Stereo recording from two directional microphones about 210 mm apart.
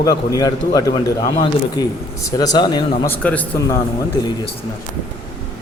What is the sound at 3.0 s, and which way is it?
Speech, 10° left (ahead or behind).